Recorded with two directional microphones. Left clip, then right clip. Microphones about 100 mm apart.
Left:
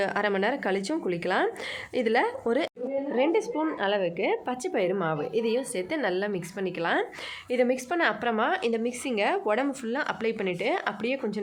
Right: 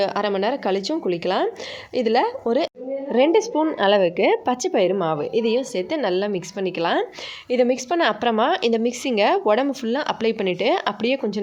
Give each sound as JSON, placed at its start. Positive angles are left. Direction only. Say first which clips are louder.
{"t": 0.0, "sound": "a woman's voice", "louder": "right 5 dB", "side_deg": -20}
{"t": 3.1, "sound": "a woman's voice", "louder": "right 9 dB", "side_deg": -55}